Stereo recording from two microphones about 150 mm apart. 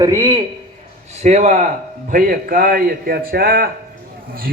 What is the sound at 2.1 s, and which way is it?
A man's voice, 75° right (ahead or behind).